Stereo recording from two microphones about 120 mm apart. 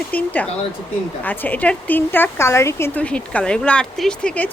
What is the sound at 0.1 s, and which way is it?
Speech, 15° left (ahead or behind).